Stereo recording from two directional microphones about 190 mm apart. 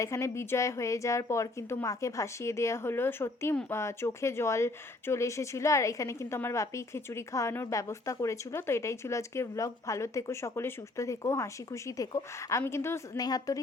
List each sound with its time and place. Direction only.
0.0 s speech: 15° left (ahead or behind)